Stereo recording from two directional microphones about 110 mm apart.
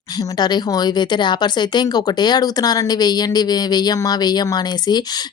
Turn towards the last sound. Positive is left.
turn(degrees=40)  # may be behind; listen again after turning